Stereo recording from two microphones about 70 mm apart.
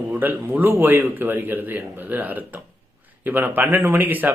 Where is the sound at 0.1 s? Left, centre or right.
Right.